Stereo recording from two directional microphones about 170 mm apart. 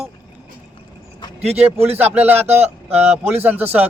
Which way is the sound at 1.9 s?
10° right (ahead or behind).